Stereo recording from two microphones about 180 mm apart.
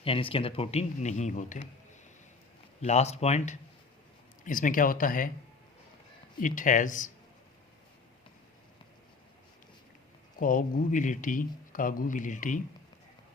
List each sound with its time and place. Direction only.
0.0 s speech: 30° left (ahead or behind)
2.8 s speech: 35° left (ahead or behind)
6.4 s speech: 45° left (ahead or behind)
10.3 s speech: 50° left (ahead or behind)